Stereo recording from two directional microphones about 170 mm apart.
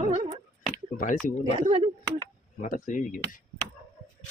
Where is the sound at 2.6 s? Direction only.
50° left (ahead or behind).